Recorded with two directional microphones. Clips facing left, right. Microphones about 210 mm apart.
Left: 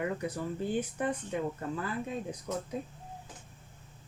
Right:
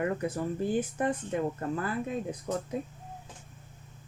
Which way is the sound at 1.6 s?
55° right (ahead or behind).